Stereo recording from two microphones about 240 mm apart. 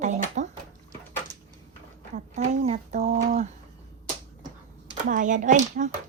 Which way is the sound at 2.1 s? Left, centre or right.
Right.